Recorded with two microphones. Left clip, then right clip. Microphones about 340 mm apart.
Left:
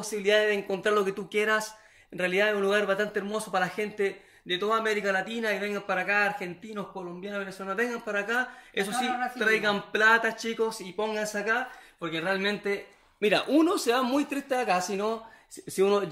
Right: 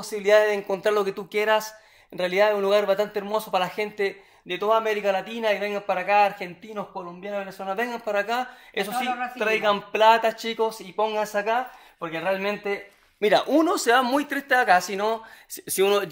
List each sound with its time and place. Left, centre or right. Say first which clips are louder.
0.0 s speech: right 5 dB; centre
13.2 s speech: right 4 dB; centre